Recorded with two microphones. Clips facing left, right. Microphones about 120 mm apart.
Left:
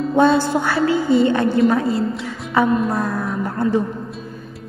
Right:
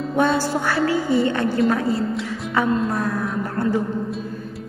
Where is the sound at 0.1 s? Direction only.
25° left (ahead or behind).